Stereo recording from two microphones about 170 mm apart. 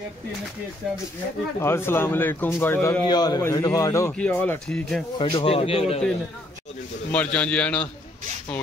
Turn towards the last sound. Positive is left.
turn(degrees=5)  # may be behind; listen again after turning